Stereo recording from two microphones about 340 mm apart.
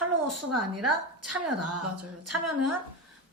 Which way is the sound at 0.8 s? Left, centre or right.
Right.